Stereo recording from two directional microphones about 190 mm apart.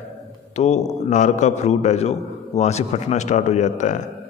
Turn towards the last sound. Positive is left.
turn(degrees=40)  # may be behind; listen again after turning